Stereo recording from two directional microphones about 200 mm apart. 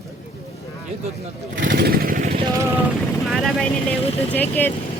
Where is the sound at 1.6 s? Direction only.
50° right (ahead or behind).